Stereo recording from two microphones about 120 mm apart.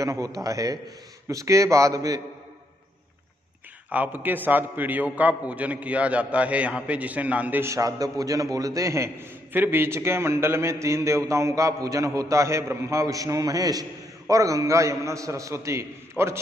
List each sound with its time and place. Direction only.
0.0 s a man's voice: 30° right (ahead or behind)
3.9 s a man's voice: 15° right (ahead or behind)